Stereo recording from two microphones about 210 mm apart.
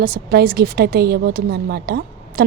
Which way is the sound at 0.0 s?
45° right (ahead or behind).